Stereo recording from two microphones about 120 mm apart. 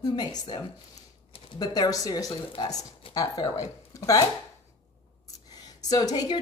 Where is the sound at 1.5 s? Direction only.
35° left (ahead or behind).